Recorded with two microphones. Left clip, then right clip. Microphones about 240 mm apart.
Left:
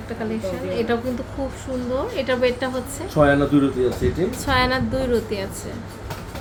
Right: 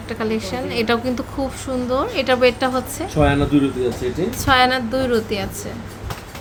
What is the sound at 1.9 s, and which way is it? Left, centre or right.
Speech, right.